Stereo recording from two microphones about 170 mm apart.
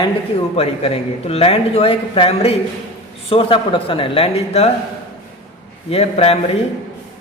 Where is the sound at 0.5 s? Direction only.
35° left (ahead or behind).